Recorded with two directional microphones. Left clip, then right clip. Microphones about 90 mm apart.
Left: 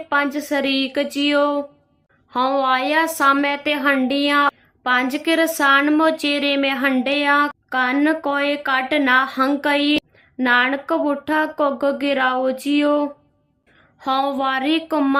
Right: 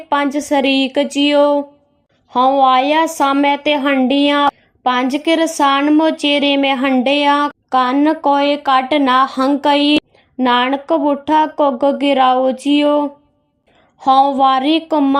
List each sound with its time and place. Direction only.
0.1 s a woman's voice: 45° right (ahead or behind)
5.8 s a woman's voice: 20° right (ahead or behind)